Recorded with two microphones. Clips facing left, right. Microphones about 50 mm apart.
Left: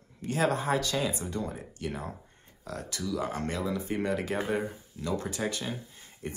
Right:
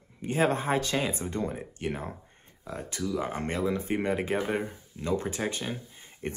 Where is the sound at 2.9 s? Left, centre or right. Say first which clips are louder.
Right 1 dB; right.